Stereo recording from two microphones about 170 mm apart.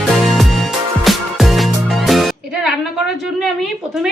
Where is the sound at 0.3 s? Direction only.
Centre (ahead or behind).